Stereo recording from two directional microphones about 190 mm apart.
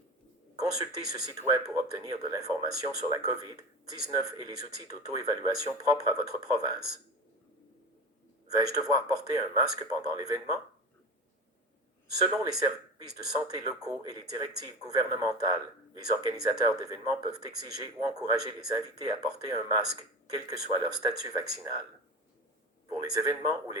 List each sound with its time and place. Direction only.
0.5 s speech: 20° right (ahead or behind)
8.5 s speech: 20° right (ahead or behind)
12.1 s speech: 20° right (ahead or behind)
22.9 s speech: 20° right (ahead or behind)